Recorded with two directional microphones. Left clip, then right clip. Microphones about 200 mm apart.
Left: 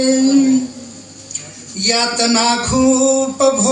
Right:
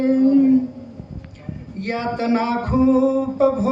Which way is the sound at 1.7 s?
30° left (ahead or behind).